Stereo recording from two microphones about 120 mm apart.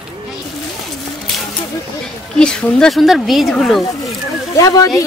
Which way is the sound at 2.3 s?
5° left (ahead or behind).